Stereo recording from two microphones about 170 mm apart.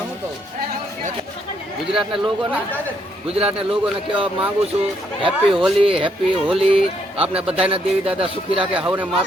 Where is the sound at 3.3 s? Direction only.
35° right (ahead or behind).